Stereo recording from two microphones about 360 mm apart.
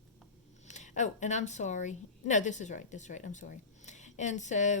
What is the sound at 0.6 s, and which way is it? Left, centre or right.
Speech, centre.